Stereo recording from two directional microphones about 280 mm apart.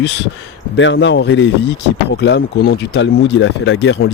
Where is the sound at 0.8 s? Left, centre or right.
Left.